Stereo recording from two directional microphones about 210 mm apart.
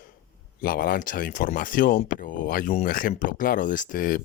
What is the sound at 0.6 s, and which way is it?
Speech, 45° left (ahead or behind).